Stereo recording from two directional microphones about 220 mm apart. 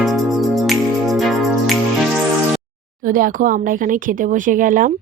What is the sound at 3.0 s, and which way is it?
Speech, 40° right (ahead or behind).